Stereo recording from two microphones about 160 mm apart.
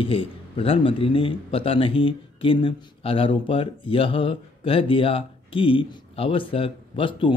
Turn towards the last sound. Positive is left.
turn(degrees=35)  # may be behind; listen again after turning